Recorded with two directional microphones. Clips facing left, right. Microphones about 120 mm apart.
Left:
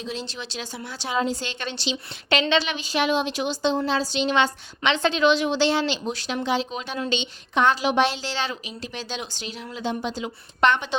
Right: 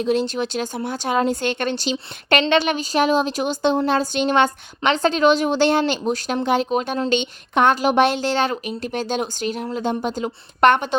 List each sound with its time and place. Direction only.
0.0 s a woman's voice: 55° right (ahead or behind)